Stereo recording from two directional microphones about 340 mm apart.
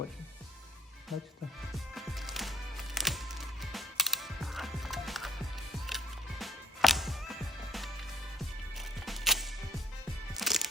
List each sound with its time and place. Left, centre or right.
1.1 s music: centre
6.4 s music: centre